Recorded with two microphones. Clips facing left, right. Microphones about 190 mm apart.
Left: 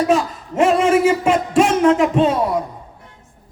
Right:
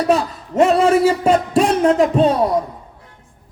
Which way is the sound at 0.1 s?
35° right (ahead or behind).